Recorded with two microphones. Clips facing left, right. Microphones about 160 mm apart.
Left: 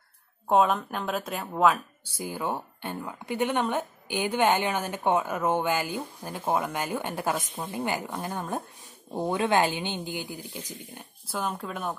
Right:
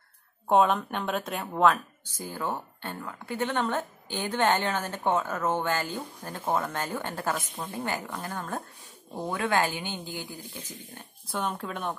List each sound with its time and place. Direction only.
0.5 s speech: centre (ahead or behind)
11.2 s speech: centre (ahead or behind)